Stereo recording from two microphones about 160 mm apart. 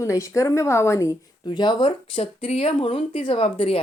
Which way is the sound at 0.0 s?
20° left (ahead or behind).